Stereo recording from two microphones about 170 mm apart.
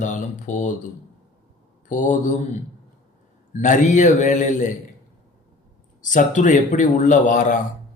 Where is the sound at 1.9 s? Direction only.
50° left (ahead or behind).